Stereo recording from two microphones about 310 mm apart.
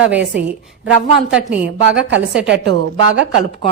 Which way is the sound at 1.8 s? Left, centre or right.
Right.